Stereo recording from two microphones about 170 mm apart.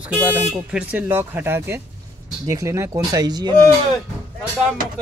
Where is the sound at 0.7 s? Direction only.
5° right (ahead or behind); by 3.5 s 25° right (ahead or behind).